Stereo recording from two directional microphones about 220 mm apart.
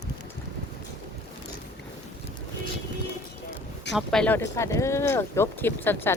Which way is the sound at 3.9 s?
Centre (ahead or behind).